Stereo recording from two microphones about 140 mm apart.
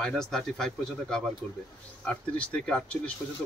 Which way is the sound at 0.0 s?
5° left (ahead or behind).